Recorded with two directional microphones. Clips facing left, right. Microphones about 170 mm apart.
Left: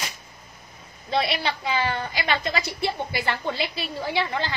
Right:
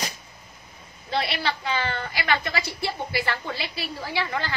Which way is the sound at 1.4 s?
15° left (ahead or behind).